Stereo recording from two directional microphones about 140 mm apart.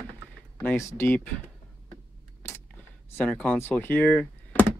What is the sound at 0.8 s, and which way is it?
Speech, 20° left (ahead or behind).